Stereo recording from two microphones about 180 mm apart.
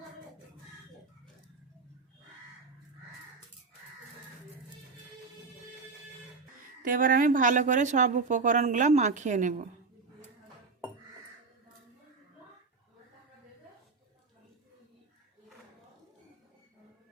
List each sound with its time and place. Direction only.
6.8 s speech: 50° right (ahead or behind)